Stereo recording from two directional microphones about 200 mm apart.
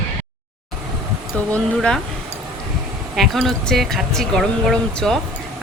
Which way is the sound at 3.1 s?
Centre (ahead or behind).